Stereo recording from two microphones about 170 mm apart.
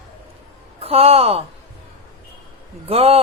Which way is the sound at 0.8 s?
35° right (ahead or behind).